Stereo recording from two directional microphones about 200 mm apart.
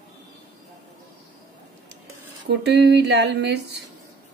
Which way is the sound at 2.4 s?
60° right (ahead or behind).